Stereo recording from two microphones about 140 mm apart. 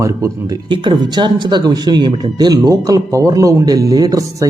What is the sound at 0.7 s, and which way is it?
Speech, 35° right (ahead or behind).